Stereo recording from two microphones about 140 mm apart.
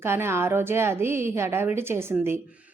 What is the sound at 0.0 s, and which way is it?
A woman's voice, 15° right (ahead or behind).